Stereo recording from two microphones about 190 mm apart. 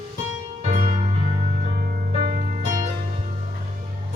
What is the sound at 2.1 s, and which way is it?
Music, 30° right (ahead or behind).